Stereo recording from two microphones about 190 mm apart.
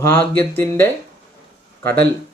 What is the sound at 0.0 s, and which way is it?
Speech, 10° left (ahead or behind).